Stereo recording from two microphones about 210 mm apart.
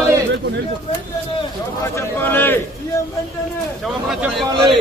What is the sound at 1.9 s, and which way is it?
Speech, 10° left (ahead or behind).